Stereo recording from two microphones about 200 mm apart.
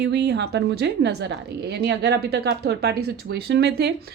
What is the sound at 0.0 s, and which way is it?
A woman's voice, 55° right (ahead or behind).